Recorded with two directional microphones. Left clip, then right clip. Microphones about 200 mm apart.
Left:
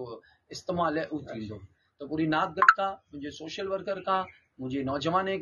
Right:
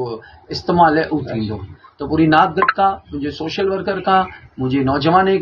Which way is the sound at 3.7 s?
25° left (ahead or behind).